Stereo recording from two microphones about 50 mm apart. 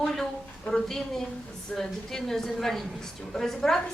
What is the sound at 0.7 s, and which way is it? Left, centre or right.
A woman's voice, centre.